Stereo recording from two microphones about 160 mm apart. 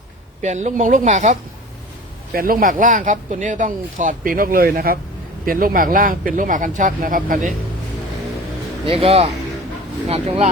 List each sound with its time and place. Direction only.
0.4 s a woman's voice: 45° right (ahead or behind)
2.3 s speech: 65° right (ahead or behind)
8.9 s speech: 35° right (ahead or behind)